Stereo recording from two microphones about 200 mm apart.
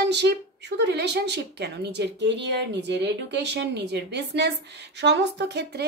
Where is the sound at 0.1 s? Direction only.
60° right (ahead or behind).